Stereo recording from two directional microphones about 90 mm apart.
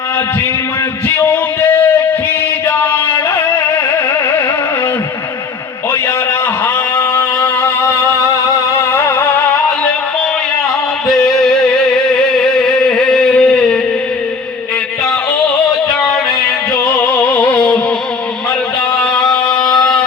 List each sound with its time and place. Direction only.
6.9 s music: 25° left (ahead or behind)
11.1 s music: 5° left (ahead or behind)
12.5 s a sound: 10° left (ahead or behind)
17.0 s music: 20° left (ahead or behind)
18.9 s music: 5° left (ahead or behind)